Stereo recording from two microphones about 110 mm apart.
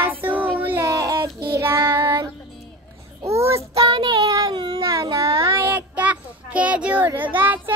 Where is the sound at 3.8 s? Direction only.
50° right (ahead or behind).